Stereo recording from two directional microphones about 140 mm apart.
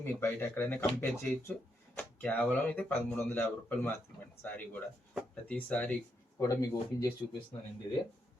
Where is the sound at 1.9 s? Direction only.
10° left (ahead or behind).